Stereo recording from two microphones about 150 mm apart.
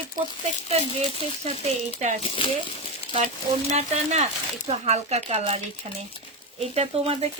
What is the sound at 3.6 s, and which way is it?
Speech, 45° right (ahead or behind).